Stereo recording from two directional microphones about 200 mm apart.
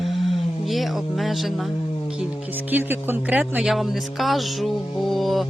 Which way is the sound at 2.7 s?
10° right (ahead or behind).